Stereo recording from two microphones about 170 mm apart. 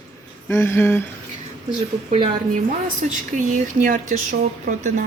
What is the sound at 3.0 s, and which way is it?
Speech, 45° right (ahead or behind).